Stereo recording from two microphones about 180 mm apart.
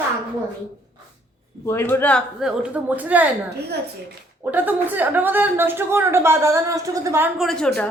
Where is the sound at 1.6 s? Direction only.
15° left (ahead or behind).